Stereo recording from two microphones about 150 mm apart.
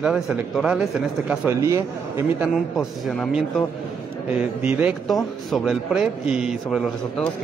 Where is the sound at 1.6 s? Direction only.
20° right (ahead or behind).